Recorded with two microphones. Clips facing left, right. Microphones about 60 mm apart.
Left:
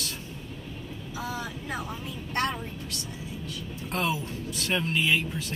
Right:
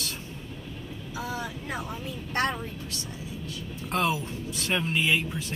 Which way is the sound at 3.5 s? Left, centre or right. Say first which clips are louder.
Right 4 dB; right.